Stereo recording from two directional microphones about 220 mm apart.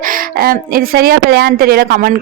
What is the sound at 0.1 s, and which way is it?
A woman's voice, 40° right (ahead or behind).